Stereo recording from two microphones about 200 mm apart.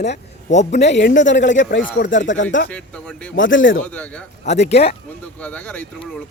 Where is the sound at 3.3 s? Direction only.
65° left (ahead or behind).